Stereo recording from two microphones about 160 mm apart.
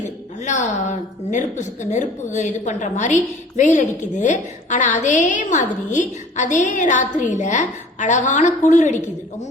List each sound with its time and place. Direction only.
0.0 s a woman's voice: 50° left (ahead or behind)